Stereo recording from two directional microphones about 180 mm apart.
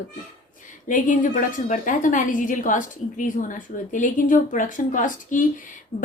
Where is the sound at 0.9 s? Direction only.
45° left (ahead or behind).